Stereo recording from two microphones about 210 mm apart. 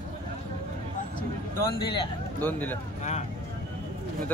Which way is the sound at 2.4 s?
10° left (ahead or behind).